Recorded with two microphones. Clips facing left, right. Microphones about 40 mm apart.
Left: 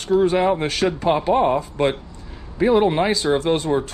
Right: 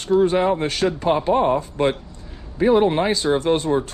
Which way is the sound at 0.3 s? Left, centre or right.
Left.